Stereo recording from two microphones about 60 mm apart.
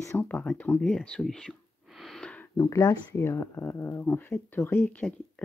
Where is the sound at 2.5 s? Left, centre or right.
Left.